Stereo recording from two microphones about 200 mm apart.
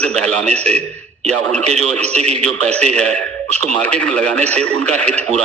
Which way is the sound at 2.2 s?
35° right (ahead or behind).